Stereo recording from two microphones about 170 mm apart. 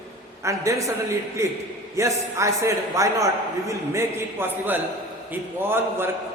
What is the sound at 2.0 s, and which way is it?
A man's voice, 15° right (ahead or behind).